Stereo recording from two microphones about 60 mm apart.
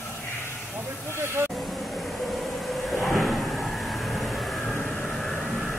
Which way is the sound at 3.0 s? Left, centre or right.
Left.